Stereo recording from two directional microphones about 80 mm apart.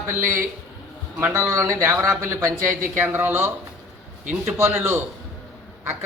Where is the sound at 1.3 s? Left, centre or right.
Right.